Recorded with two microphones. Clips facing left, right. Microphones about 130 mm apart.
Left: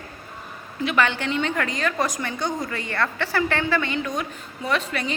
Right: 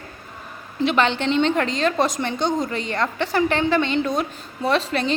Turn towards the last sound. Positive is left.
turn(degrees=-30)  # may be behind; listen again after turning